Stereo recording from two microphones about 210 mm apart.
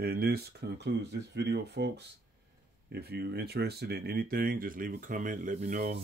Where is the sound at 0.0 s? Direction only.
50° right (ahead or behind).